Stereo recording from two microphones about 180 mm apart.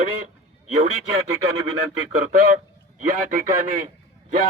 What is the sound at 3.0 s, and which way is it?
Speech, 45° right (ahead or behind).